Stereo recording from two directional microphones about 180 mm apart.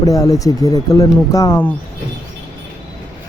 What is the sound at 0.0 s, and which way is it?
Speech, 20° left (ahead or behind).